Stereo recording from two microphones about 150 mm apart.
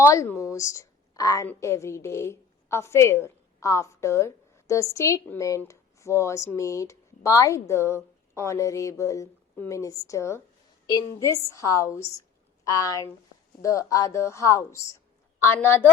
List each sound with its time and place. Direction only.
0.0 s a woman's voice: 15° left (ahead or behind)